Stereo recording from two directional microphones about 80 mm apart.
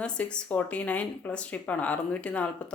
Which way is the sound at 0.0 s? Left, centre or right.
Centre.